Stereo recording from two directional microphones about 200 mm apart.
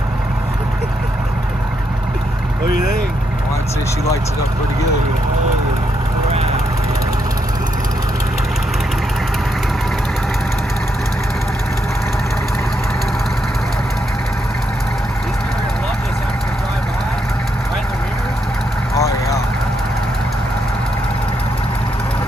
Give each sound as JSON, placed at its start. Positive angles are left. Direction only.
{"t": 18.9, "sound": "vehicle", "side_deg": 15}